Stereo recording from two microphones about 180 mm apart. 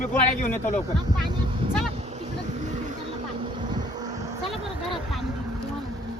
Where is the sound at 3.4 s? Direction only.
25° right (ahead or behind).